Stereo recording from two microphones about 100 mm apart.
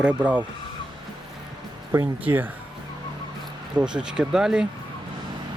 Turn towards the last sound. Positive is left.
turn(degrees=-5)  # may be behind; listen again after turning